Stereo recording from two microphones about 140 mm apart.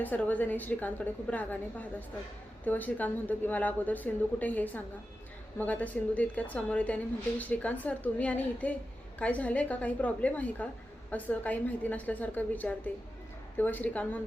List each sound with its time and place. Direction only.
0.0 s a woman's voice: 10° left (ahead or behind)